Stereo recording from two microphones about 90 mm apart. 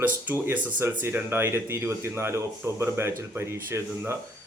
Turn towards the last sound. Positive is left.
turn(degrees=-30)  # may be behind; listen again after turning